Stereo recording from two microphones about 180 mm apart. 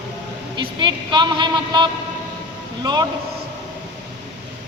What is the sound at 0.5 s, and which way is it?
A woman's voice, 25° right (ahead or behind).